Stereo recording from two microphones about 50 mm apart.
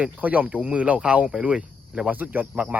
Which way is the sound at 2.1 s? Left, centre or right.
Right.